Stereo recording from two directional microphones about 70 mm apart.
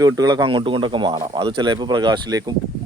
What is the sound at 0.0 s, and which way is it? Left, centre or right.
Speech, right.